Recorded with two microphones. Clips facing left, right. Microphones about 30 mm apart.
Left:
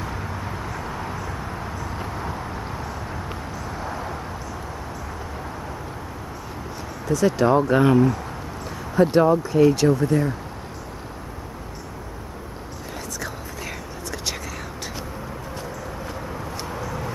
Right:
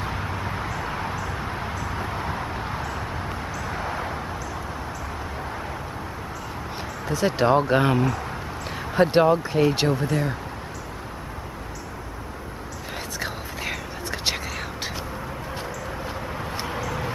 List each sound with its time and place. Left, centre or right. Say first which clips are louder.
0.0 s vehicle: right 2 dB; right
1.4 s a sound: right 1 dB; right
3.6 s vehicle: right 2 dB; right
7.1 s speech: left 2 dB; right
8.6 s speech: left 1 dB; right
13.2 s a sound: right 2 dB; right
16.5 s vehicle: right 2 dB; right